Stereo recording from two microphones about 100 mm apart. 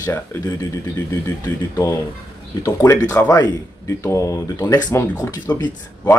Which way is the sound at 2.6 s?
30° left (ahead or behind).